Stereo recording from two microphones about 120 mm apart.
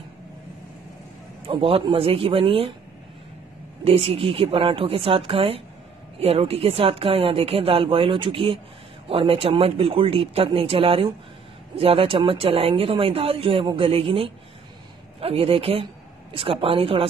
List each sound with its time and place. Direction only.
1.4 s speech: 50° right (ahead or behind)
3.8 s speech: 50° right (ahead or behind)